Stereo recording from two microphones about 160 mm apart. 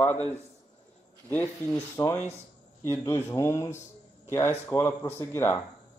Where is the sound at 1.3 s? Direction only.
10° left (ahead or behind).